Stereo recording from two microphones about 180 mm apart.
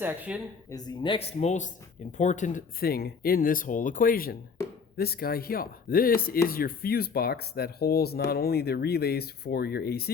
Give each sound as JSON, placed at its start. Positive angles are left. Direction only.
{"t": 0.0, "sound": "speech", "side_deg": -10}
{"t": 0.7, "sound": "speech", "side_deg": 20}